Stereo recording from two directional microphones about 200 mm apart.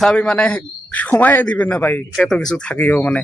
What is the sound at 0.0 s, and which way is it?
A man's voice, 5° left (ahead or behind).